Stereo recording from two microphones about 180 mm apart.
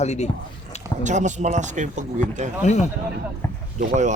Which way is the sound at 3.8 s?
45° right (ahead or behind).